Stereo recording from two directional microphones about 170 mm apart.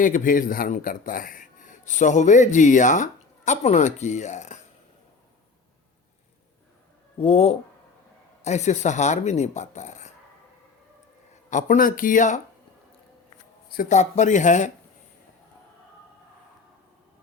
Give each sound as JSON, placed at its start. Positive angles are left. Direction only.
{"t": 0.0, "sound": "a man's voice", "side_deg": 50}
{"t": 7.2, "sound": "a man's voice", "side_deg": 35}
{"t": 11.4, "sound": "a man's voice", "side_deg": 45}
{"t": 13.7, "sound": "a man's voice", "side_deg": 45}